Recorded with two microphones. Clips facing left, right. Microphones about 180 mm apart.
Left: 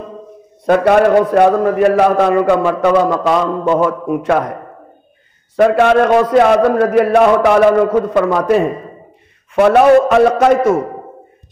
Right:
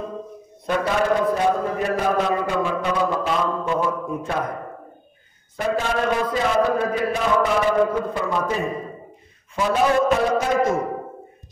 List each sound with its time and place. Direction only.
0.7 s a man's voice: 65° left (ahead or behind)
5.6 s a man's voice: 65° left (ahead or behind)
9.6 s a man's voice: 65° left (ahead or behind)